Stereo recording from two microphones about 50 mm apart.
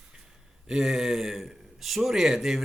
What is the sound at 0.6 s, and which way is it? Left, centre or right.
A man's voice, centre.